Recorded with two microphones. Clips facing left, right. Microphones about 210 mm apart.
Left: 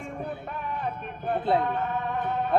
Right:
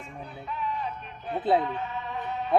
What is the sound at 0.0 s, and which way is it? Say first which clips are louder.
Sheep: left 6 dB; 55° left (ahead or behind).